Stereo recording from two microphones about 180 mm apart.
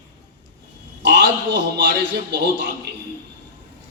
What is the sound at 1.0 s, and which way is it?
A man's voice, 70° right (ahead or behind).